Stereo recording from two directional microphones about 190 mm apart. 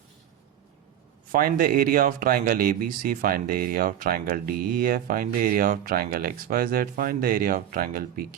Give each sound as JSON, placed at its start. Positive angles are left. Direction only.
{"t": 1.3, "sound": "speech", "side_deg": -50}